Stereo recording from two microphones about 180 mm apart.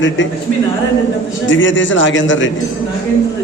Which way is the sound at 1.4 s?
90° left.